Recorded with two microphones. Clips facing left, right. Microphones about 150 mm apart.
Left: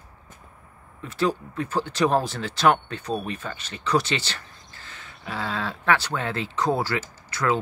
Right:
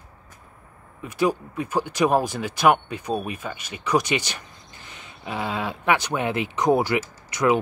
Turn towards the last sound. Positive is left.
turn(degrees=-15)  # may be behind; listen again after turning